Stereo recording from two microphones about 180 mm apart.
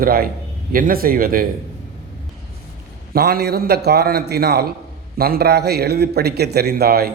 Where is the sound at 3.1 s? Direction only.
60° right (ahead or behind).